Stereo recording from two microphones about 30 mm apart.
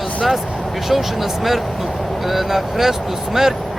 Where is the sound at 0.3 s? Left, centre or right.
Centre.